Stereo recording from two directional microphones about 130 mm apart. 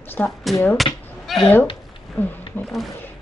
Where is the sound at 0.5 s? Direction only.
Centre (ahead or behind).